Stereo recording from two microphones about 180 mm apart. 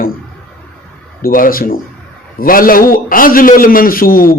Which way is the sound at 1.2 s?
50° left (ahead or behind).